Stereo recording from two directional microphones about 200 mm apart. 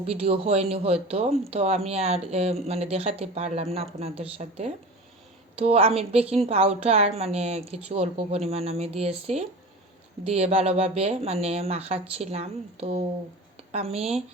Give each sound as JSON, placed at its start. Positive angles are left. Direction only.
{"t": 0.0, "sound": "a woman's voice", "side_deg": -30}